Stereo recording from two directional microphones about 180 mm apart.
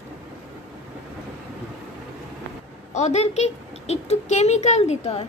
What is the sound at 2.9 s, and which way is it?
A woman's voice, 40° left (ahead or behind).